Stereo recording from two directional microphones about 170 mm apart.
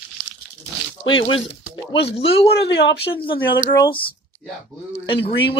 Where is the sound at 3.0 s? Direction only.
30° left (ahead or behind).